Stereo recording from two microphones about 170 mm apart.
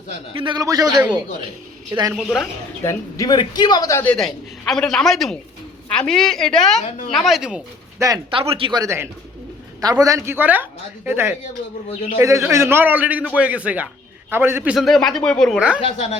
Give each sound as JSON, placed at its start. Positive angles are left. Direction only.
{"t": 0.3, "sound": "speech", "side_deg": -25}
{"t": 2.1, "sound": "a woman's voice", "side_deg": 0}
{"t": 2.8, "sound": "a man's voice", "side_deg": 20}
{"t": 6.8, "sound": "a woman's voice", "side_deg": 50}
{"t": 7.1, "sound": "a woman's voice", "side_deg": 0}
{"t": 7.9, "sound": "speech", "side_deg": -20}
{"t": 8.3, "sound": "a man's voice", "side_deg": -30}
{"t": 12.5, "sound": "a man's voice", "side_deg": -15}
{"t": 15.8, "sound": "speech", "side_deg": 35}